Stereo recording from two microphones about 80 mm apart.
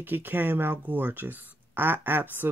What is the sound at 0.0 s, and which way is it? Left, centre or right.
Speech, right.